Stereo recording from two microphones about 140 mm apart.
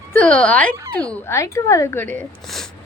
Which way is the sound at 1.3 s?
20° left (ahead or behind).